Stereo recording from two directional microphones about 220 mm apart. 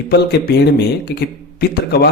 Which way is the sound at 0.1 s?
50° left (ahead or behind).